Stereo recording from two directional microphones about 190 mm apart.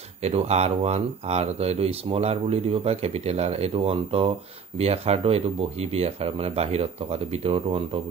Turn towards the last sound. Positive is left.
turn(degrees=-30)  # may be behind; listen again after turning